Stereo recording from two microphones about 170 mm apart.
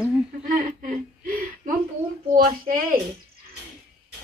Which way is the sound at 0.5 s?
55° right (ahead or behind).